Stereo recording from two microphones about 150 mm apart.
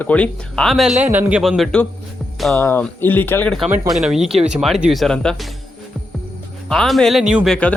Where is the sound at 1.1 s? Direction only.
10° right (ahead or behind).